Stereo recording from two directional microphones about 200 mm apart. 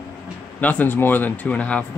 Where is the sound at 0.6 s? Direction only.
10° left (ahead or behind).